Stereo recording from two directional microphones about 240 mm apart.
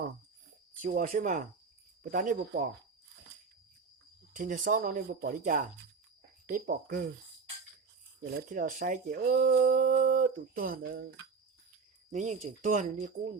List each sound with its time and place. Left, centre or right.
0.8 s speech: right
4.4 s speech: right
8.2 s speech: right
12.1 s speech: right